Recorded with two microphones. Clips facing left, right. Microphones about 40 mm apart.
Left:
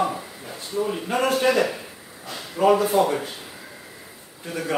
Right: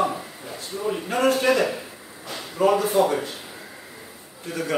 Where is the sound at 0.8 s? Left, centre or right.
Centre.